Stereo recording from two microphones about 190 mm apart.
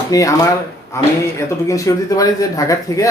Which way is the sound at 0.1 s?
20° left (ahead or behind).